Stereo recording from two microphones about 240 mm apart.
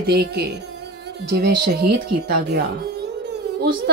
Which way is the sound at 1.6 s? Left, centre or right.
Right.